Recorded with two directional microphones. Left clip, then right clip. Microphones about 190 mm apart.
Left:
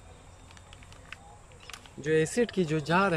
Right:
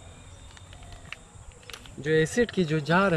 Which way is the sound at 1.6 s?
5° left (ahead or behind).